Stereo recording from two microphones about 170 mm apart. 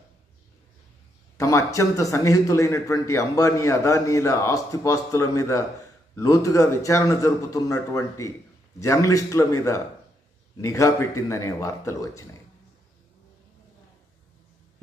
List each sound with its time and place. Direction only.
1.4 s a man's voice: 20° left (ahead or behind)